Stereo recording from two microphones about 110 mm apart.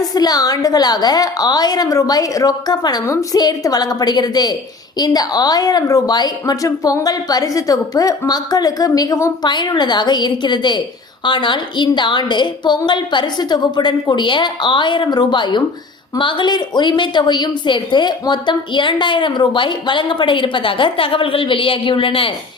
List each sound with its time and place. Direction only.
0.0 s a woman's voice: 35° left (ahead or behind); by 22.3 s 55° left (ahead or behind)